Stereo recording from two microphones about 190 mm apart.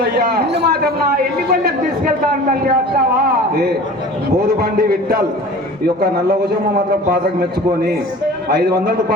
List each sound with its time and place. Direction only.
0.0 s a man's voice: 55° right (ahead or behind)
4.4 s a man's voice: 50° right (ahead or behind)
8.4 s a man's voice: 55° right (ahead or behind)